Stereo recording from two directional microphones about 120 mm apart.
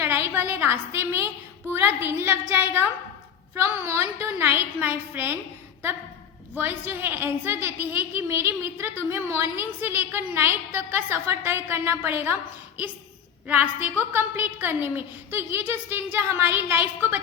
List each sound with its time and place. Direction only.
0.0 s a woman's voice: 20° right (ahead or behind)
6.6 s a woman's voice: 15° right (ahead or behind)